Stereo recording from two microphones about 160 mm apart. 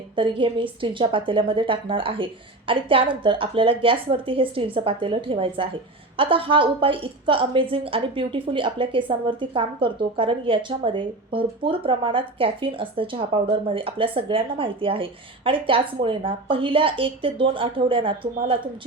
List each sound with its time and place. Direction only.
0.2 s a woman's voice: 30° right (ahead or behind)